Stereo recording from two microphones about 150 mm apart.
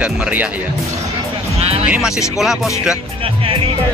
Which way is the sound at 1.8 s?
5° right (ahead or behind).